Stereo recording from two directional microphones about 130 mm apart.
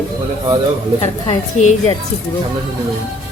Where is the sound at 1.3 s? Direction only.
60° left (ahead or behind).